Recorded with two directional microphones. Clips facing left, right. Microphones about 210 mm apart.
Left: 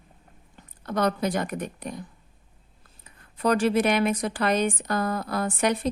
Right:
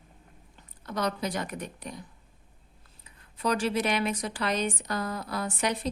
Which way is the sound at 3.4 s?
55° left (ahead or behind).